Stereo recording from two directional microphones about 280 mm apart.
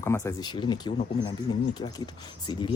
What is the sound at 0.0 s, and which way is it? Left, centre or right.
Speech, centre.